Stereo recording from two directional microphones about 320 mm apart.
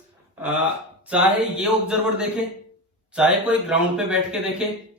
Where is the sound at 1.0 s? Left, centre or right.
Centre.